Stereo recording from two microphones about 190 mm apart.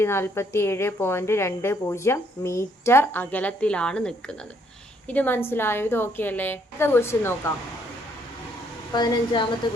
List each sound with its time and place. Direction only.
0.0 s a woman's voice: 15° left (ahead or behind)
8.9 s a woman's voice: 20° left (ahead or behind)